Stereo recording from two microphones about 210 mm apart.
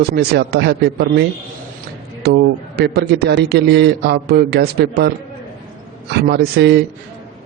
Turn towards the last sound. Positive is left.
turn(degrees=-55)  # may be behind; listen again after turning